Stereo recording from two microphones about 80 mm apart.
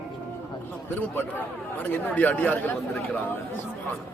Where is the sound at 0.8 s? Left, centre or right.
Left.